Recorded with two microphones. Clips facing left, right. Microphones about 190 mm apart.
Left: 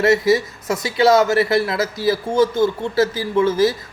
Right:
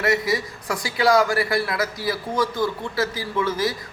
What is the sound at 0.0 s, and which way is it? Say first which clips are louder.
Speech: left 7 dB; 25° left (ahead or behind).